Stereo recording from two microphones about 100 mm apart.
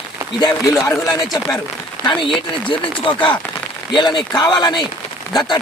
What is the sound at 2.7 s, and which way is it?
A man's voice, 55° left (ahead or behind).